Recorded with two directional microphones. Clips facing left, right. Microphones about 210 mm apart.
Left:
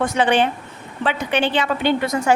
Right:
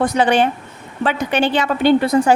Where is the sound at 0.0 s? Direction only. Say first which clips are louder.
Right 3 dB; 35° right (ahead or behind).